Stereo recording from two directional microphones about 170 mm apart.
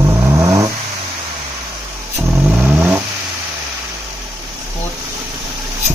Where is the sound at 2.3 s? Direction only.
10° right (ahead or behind).